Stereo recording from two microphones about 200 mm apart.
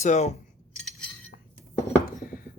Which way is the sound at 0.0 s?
35° left (ahead or behind).